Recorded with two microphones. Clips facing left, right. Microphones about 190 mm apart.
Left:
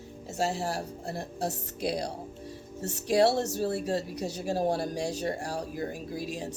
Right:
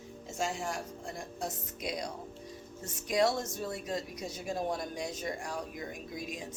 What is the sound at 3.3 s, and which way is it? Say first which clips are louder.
Speech: left 6 dB; 70° left (ahead or behind).